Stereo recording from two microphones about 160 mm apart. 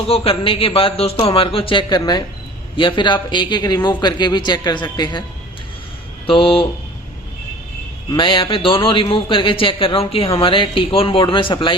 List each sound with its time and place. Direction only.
0.1 s a man's voice: 35° left (ahead or behind)
6.2 s a man's voice: 35° left (ahead or behind)
8.1 s a man's voice: 30° left (ahead or behind)